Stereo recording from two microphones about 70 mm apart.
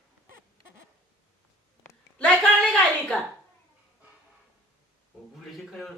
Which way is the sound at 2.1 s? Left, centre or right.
Centre.